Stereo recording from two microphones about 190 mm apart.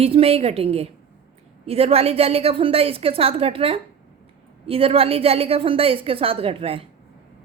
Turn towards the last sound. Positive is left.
turn(degrees=-30)  # may be behind; listen again after turning